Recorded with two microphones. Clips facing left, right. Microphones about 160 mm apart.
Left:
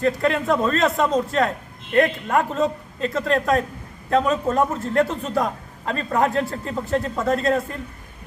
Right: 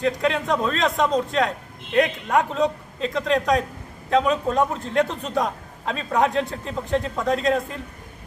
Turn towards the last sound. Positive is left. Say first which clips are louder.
# left 1 dB
turn(degrees=0)  # may be behind; listen again after turning